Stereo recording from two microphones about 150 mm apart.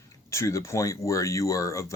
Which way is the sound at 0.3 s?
20° left (ahead or behind).